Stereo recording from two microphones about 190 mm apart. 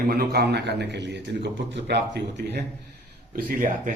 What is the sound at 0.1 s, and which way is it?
A man's voice, 55° right (ahead or behind).